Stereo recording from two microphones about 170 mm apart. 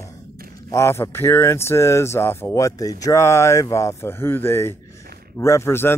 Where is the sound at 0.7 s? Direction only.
15° left (ahead or behind).